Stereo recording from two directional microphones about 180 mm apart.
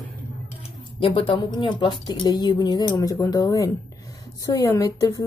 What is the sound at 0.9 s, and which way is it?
A woman's voice, 30° left (ahead or behind).